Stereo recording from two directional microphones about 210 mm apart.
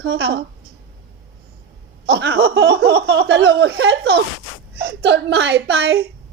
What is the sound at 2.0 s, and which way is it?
A woman's voice, 50° right (ahead or behind).